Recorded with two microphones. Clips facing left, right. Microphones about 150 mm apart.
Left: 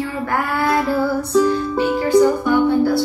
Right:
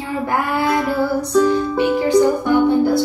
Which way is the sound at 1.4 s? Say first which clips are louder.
Right 2 dB; 15° right (ahead or behind).